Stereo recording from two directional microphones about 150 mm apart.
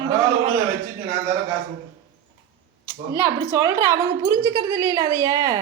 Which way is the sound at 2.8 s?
15° right (ahead or behind).